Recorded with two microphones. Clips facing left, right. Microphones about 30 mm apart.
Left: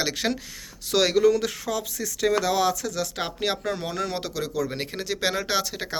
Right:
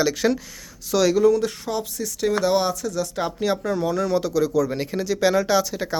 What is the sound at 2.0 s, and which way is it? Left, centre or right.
Speech, left.